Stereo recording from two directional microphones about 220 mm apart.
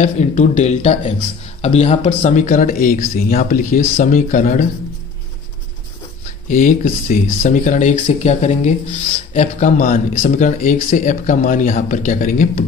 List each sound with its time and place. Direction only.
0.0 s speech: 30° left (ahead or behind)
6.5 s speech: 40° left (ahead or behind)